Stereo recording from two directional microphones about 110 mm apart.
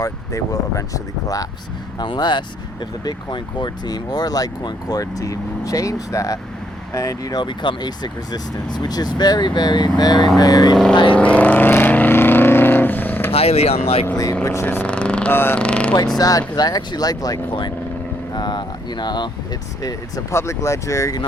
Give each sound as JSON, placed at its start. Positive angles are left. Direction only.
{"t": 0.0, "sound": "speech", "side_deg": 30}
{"t": 2.0, "sound": "speech", "side_deg": 40}
{"t": 11.2, "sound": "vehicle", "side_deg": 15}
{"t": 13.3, "sound": "speech", "side_deg": 65}
{"t": 14.4, "sound": "speech", "side_deg": 25}
{"t": 14.8, "sound": "speech", "side_deg": 10}
{"t": 16.1, "sound": "speech", "side_deg": 35}
{"t": 19.8, "sound": "speech", "side_deg": 30}